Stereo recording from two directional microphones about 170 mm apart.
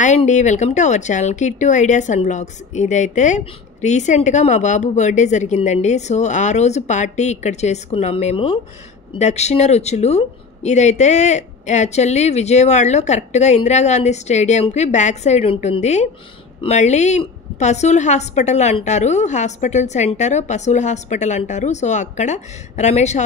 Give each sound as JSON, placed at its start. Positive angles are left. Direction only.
{"t": 0.0, "sound": "speech", "side_deg": 45}